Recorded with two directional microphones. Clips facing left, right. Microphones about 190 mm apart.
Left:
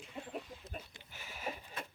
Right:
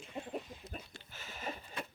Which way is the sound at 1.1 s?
10° left (ahead or behind).